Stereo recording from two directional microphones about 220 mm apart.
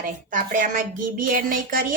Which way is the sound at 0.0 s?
35° right (ahead or behind).